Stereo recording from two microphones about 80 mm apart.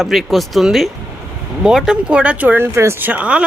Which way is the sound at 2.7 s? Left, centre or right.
Right.